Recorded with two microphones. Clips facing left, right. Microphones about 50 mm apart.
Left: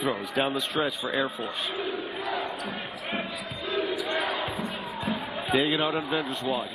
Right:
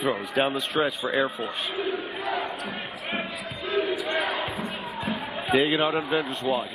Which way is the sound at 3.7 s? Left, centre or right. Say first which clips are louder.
Right 3 dB; centre.